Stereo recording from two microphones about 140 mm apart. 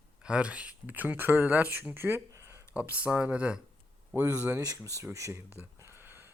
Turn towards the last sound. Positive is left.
turn(degrees=-15)  # may be behind; listen again after turning